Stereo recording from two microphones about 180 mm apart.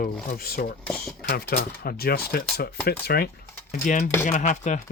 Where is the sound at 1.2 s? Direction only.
60° left (ahead or behind).